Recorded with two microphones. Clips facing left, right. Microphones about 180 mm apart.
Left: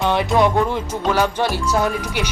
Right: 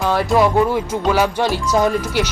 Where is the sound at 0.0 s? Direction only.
Centre (ahead or behind).